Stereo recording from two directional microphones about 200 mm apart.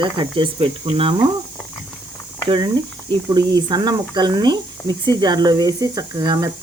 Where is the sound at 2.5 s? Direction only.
20° right (ahead or behind).